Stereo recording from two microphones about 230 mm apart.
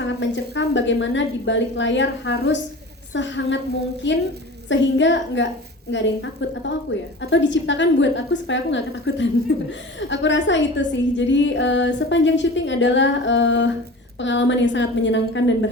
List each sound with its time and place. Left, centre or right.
0.0 s a woman's voice: left